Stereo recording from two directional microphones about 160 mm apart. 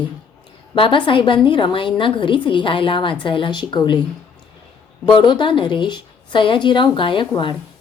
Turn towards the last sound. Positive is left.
turn(degrees=30)  # may be behind; listen again after turning